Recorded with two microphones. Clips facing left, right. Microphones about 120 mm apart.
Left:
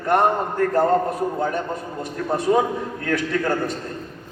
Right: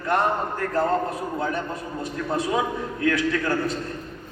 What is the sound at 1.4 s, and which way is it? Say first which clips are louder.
A man's voice: left 3 dB; 45° left (ahead or behind).